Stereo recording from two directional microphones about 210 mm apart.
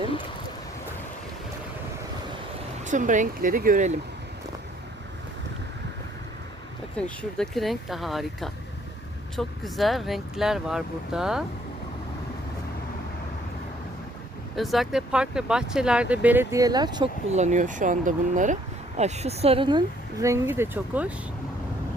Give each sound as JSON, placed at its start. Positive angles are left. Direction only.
{"t": 2.8, "sound": "speech", "side_deg": -35}
{"t": 6.9, "sound": "speech", "side_deg": 5}
{"t": 14.5, "sound": "speech", "side_deg": 0}
{"t": 17.3, "sound": "a woman's voice", "side_deg": -35}